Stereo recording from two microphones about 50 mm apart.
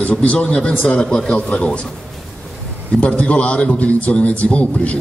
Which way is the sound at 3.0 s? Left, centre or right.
Left.